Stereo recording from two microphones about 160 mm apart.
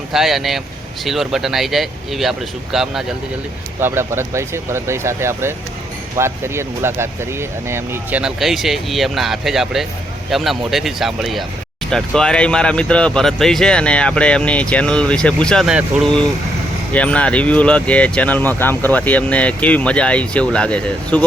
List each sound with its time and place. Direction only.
0.1 s speech: centre (ahead or behind)
3.8 s speech: 15° right (ahead or behind)
8.2 s speech: centre (ahead or behind)